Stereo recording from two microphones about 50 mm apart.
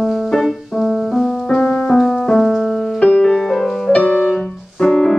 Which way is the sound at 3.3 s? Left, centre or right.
Centre.